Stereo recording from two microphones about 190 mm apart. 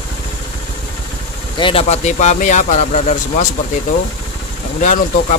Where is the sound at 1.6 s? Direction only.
30° left (ahead or behind).